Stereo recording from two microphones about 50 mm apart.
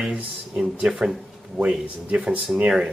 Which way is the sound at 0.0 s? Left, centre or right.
Right.